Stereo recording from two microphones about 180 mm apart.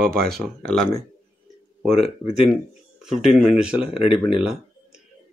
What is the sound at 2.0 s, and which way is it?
Speech, 35° left (ahead or behind).